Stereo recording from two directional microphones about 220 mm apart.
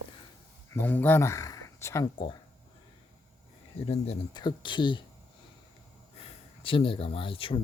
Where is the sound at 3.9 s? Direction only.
25° left (ahead or behind).